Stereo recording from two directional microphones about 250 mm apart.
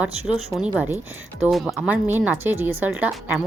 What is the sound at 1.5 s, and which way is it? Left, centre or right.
Speech, centre.